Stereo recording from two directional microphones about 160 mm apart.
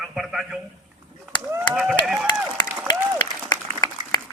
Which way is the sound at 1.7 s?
5° right (ahead or behind).